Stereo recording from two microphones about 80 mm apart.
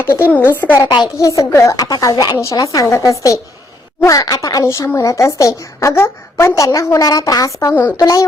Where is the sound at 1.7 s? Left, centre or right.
Left.